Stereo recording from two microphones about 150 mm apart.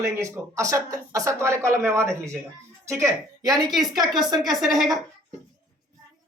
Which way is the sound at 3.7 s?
Centre (ahead or behind).